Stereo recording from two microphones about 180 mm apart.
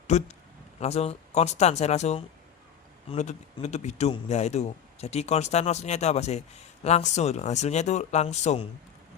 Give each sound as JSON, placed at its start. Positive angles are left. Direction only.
{"t": 0.1, "sound": "a man's voice", "side_deg": 40}